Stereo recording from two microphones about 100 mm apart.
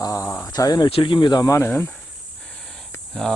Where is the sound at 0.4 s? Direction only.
40° left (ahead or behind).